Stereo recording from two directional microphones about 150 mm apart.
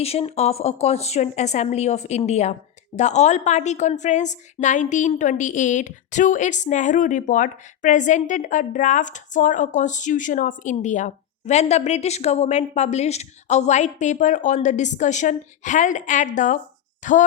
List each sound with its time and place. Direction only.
0.0 s a woman's voice: 40° left (ahead or behind)